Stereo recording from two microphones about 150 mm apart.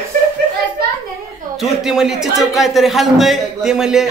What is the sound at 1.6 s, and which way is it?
Speech, 5° right (ahead or behind).